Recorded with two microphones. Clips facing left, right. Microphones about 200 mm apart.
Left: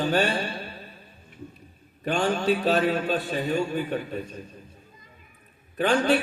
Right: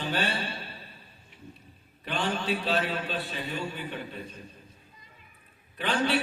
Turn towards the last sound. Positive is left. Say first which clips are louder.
# left 6 dB
turn(degrees=45)  # may be behind; listen again after turning